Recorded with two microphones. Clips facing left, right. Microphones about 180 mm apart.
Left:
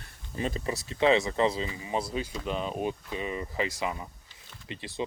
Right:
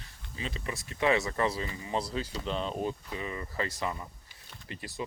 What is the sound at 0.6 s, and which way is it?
Speech, 30° left (ahead or behind).